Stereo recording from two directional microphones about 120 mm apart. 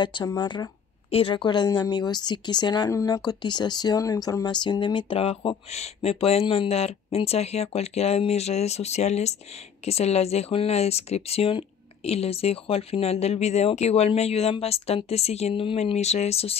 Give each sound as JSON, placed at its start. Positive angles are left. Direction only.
{"t": 0.0, "sound": "speech", "side_deg": 35}
{"t": 2.9, "sound": "speech", "side_deg": 25}
{"t": 3.3, "sound": "speech", "side_deg": 35}